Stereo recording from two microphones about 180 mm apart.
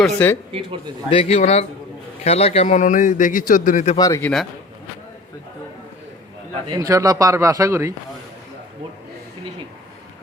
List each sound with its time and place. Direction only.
0.0 s speech: 10° left (ahead or behind)
1.1 s a man's voice: 35° left (ahead or behind)
3.9 s speech: 20° left (ahead or behind)
6.7 s speech: 20° right (ahead or behind)